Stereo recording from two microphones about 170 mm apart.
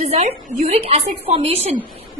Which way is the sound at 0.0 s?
40° right (ahead or behind).